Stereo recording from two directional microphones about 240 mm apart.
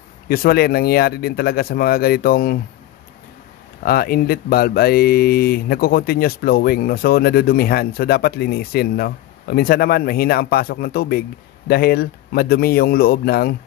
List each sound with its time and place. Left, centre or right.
0.3 s speech: left
3.8 s speech: left